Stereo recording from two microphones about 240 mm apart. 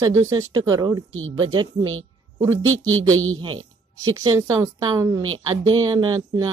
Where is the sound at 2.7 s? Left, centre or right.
Right.